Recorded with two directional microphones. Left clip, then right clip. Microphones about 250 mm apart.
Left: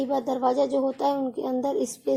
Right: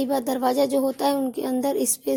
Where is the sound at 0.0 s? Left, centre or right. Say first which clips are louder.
Right 1 dB; right.